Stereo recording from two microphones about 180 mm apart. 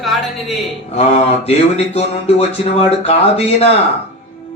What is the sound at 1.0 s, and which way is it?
Mantra, 35° left (ahead or behind).